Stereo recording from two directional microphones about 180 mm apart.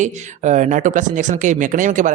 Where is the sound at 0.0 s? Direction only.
40° right (ahead or behind).